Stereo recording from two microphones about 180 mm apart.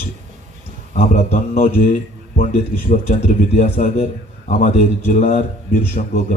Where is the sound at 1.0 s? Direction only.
40° left (ahead or behind).